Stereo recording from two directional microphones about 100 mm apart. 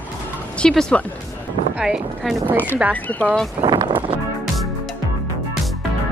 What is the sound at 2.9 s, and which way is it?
Speech, 15° left (ahead or behind).